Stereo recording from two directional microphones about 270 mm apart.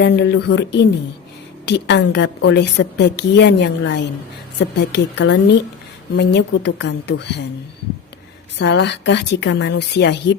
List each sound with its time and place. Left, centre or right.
0.0 s a woman's voice: left
8.5 s a woman's voice: left